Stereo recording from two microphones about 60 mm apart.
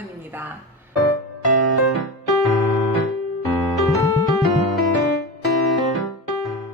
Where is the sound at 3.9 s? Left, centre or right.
Left.